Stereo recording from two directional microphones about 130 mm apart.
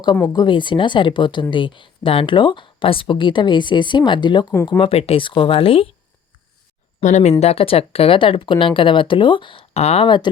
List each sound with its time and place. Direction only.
0.3 s speech: 40° left (ahead or behind)
4.8 s speech: 50° left (ahead or behind)
7.0 s speech: 65° left (ahead or behind)
10.1 s speech: 35° left (ahead or behind)